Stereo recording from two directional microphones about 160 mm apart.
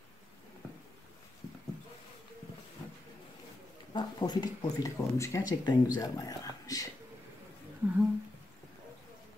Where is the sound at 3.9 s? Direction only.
25° left (ahead or behind).